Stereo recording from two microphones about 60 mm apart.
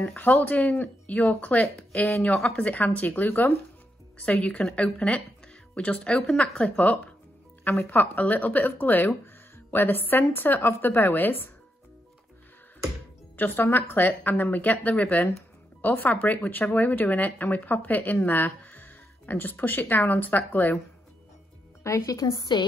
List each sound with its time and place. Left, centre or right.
0.2 s speech: left
4.2 s speech: centre
7.8 s speech: left
13.4 s speech: left
22.0 s a woman's voice: left